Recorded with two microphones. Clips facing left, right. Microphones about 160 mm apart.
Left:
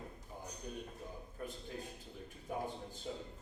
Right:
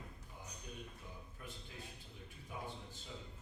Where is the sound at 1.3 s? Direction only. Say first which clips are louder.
Left 11 dB; 45° left (ahead or behind).